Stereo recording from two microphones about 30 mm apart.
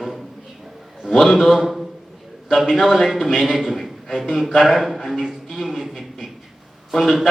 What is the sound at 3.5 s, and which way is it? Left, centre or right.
Speech, centre.